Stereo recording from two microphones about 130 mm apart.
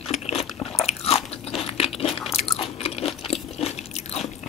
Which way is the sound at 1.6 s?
50° left (ahead or behind).